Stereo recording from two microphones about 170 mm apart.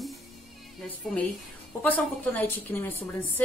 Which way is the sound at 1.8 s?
10° left (ahead or behind).